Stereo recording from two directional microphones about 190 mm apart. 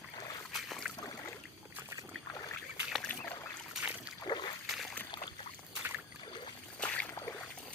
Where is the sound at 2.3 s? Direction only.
15° left (ahead or behind).